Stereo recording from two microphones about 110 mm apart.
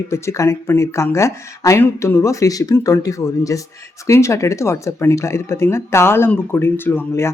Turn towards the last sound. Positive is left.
turn(degrees=20)  # may be behind; listen again after turning